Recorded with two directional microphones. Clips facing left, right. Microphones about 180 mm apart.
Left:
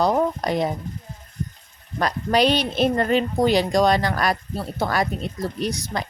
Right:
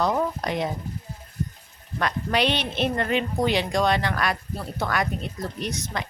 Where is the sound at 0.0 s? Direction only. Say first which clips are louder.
Left 4 dB; 35° left (ahead or behind).